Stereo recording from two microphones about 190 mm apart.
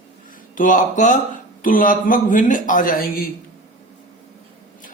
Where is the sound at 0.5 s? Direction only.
40° left (ahead or behind).